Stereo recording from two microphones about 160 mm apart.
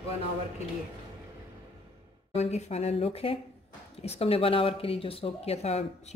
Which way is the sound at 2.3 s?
45° left (ahead or behind).